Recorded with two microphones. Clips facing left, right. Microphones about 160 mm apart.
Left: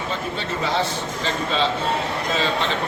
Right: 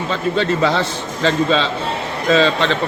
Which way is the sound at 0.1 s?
85° right.